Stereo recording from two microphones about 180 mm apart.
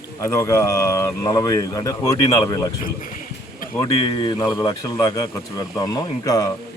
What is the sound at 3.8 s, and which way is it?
Speech, 20° left (ahead or behind).